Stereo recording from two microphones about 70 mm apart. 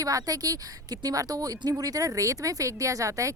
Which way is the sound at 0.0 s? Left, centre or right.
Right.